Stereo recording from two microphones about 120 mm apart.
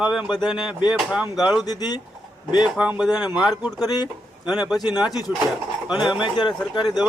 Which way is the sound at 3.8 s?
35° left (ahead or behind).